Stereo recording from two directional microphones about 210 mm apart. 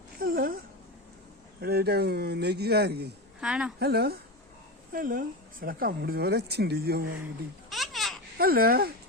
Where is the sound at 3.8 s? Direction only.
50° right (ahead or behind).